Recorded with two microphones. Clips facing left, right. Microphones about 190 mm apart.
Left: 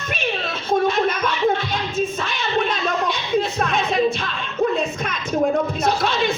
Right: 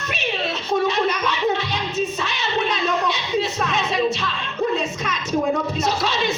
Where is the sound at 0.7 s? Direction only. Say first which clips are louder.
Left 2 dB; 50° left (ahead or behind).